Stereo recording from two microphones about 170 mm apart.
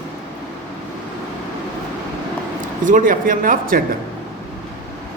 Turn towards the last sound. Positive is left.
turn(degrees=-55)  # may be behind; listen again after turning